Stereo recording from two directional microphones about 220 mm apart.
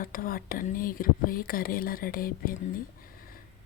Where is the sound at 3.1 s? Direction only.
40° left (ahead or behind).